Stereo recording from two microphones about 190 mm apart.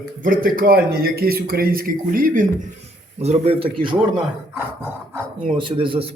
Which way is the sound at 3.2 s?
35° right (ahead or behind).